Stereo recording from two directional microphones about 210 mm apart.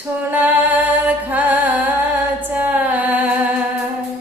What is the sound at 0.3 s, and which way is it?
Music, 10° right (ahead or behind).